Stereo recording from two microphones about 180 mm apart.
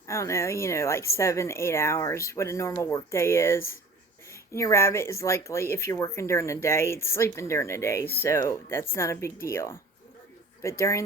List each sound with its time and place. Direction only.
0.1 s speech: 15° left (ahead or behind)